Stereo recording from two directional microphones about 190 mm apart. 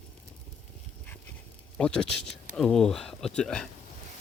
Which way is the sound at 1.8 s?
5° left (ahead or behind).